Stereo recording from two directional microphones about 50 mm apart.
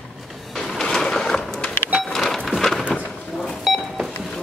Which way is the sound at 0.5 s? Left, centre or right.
Centre.